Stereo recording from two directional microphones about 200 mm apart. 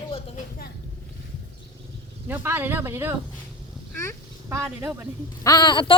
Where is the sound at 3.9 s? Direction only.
15° left (ahead or behind).